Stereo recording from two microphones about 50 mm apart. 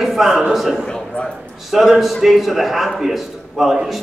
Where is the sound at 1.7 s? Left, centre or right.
Centre.